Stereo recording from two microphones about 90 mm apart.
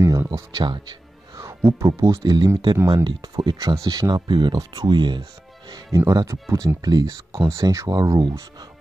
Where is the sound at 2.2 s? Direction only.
50° right (ahead or behind).